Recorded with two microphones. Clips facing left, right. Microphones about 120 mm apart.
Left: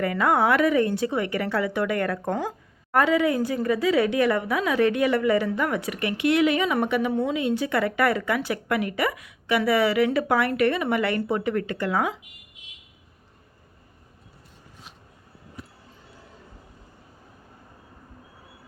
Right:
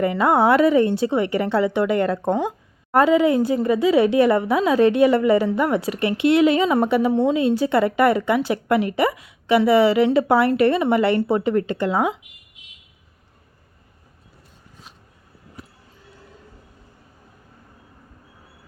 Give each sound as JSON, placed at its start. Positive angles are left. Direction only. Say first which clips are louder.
{"t": 0.0, "sound": "a woman's voice", "louder": "right 4 dB", "side_deg": -25}